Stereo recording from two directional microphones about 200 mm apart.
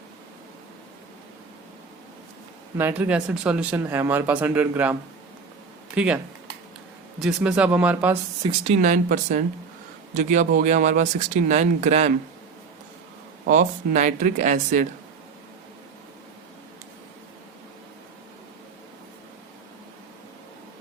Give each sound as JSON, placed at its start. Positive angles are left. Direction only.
{"t": 2.7, "sound": "speech", "side_deg": -10}
{"t": 6.0, "sound": "speech", "side_deg": -5}
{"t": 7.2, "sound": "speech", "side_deg": -5}
{"t": 8.4, "sound": "speech", "side_deg": -30}
{"t": 13.5, "sound": "speech", "side_deg": -40}